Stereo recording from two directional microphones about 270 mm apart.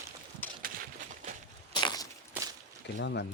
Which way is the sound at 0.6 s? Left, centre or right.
Right.